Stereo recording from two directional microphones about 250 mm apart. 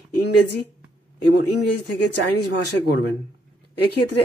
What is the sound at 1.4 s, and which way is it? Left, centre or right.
Speech, left.